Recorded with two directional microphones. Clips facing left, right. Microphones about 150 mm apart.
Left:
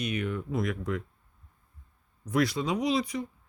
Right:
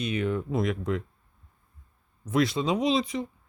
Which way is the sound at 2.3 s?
25° right (ahead or behind).